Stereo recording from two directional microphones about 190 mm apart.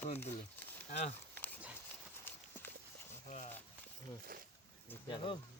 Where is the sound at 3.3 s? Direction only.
35° left (ahead or behind).